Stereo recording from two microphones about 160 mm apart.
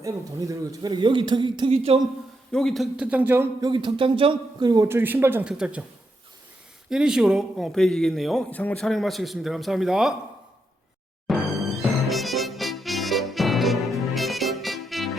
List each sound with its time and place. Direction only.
0.0 s a man's voice: 20° right (ahead or behind); by 2.0 s 40° right (ahead or behind)
2.5 s a man's voice: 5° left (ahead or behind); by 3.7 s 15° right (ahead or behind)
3.7 s a man's voice: 30° right (ahead or behind); by 5.8 s 5° right (ahead or behind)
6.9 s a man's voice: 5° right (ahead or behind)
11.3 s music: centre (ahead or behind)